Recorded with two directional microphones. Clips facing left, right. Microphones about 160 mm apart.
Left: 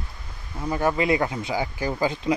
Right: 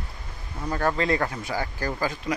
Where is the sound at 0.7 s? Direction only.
15° left (ahead or behind).